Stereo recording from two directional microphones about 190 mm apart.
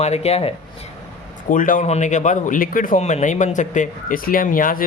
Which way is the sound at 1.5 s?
45° left (ahead or behind).